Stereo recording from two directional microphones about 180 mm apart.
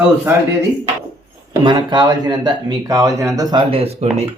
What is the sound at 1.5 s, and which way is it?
Speech, 25° right (ahead or behind).